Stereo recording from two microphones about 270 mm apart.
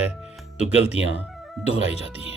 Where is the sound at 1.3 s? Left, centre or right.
Centre.